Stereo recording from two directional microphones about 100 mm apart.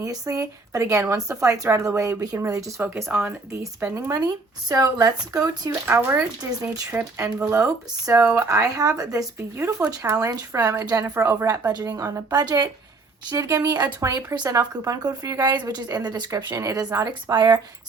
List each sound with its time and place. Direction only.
0.0 s a woman's voice: 35° right (ahead or behind)
2.8 s speech: 20° right (ahead or behind)
3.9 s a woman's voice: 35° right (ahead or behind)
5.9 s speech: 25° right (ahead or behind)
7.2 s a woman's voice: 30° right (ahead or behind)